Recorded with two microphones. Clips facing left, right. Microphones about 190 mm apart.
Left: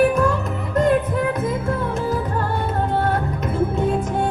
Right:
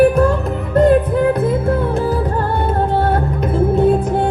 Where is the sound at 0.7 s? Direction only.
30° right (ahead or behind).